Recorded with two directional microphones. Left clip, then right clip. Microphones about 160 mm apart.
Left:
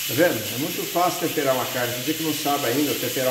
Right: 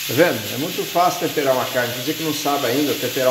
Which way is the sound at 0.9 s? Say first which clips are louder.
Right 4 dB; 25° right (ahead or behind).